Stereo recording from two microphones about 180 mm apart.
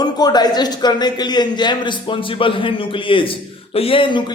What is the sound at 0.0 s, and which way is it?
A man's voice, 20° left (ahead or behind).